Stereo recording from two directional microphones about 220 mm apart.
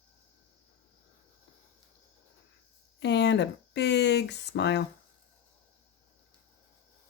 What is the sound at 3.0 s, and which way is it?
Speech, 50° left (ahead or behind).